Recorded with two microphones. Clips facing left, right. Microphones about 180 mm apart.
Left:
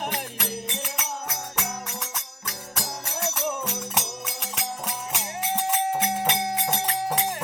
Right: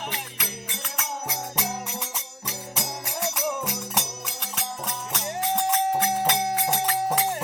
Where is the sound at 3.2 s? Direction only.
Centre (ahead or behind).